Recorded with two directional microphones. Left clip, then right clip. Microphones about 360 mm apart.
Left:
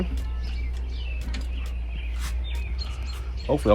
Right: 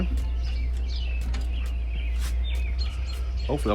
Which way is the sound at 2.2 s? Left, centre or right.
Centre.